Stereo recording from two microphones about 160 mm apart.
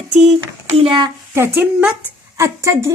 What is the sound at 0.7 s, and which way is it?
Speech, 30° right (ahead or behind).